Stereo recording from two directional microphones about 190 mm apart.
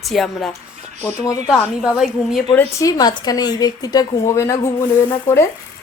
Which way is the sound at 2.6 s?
15° left (ahead or behind).